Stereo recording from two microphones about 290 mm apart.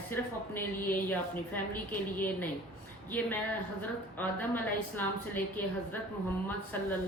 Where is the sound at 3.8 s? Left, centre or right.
Centre.